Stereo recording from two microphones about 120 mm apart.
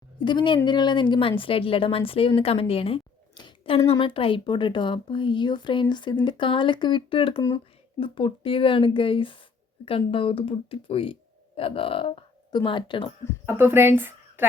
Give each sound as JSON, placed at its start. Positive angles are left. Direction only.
{"t": 0.3, "sound": "a woman's voice", "side_deg": 40}
{"t": 3.3, "sound": "a sound", "side_deg": 40}
{"t": 4.0, "sound": "a woman's voice", "side_deg": 45}
{"t": 13.4, "sound": "speech", "side_deg": -20}